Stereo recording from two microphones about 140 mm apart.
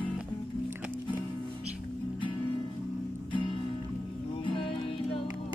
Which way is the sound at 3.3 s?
35° left (ahead or behind).